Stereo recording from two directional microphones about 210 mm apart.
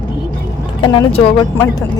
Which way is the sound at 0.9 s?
25° left (ahead or behind).